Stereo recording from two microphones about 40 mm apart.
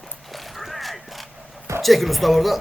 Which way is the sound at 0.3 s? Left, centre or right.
Centre.